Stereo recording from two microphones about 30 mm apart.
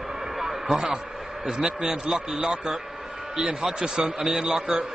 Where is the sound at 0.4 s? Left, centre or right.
Centre.